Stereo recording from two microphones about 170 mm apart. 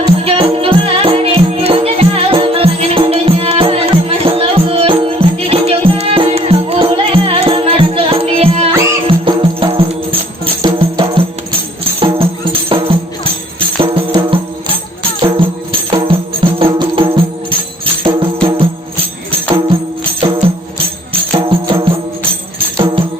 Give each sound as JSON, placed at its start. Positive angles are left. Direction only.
{"t": 0.0, "sound": "music", "side_deg": -35}
{"t": 8.7, "sound": "music", "side_deg": -15}
{"t": 9.0, "sound": "music", "side_deg": -30}
{"t": 13.8, "sound": "music", "side_deg": -30}
{"t": 20.2, "sound": "music", "side_deg": -30}